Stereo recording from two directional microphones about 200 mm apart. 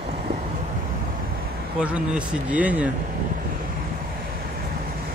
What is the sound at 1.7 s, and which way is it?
Speech, 5° right (ahead or behind).